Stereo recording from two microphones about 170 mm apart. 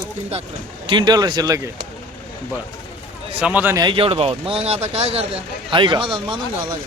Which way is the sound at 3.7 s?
30° right (ahead or behind).